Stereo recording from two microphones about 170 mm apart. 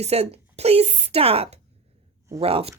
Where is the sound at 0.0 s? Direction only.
35° right (ahead or behind).